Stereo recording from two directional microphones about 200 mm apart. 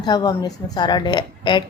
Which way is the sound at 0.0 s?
20° left (ahead or behind).